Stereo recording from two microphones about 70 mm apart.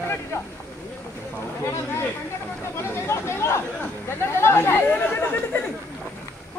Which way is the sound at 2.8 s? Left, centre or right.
Left.